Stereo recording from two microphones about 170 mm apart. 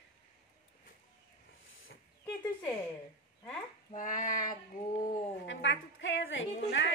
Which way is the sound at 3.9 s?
50° left (ahead or behind).